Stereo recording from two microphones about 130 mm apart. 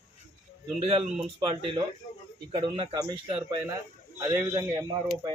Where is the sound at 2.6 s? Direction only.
45° right (ahead or behind).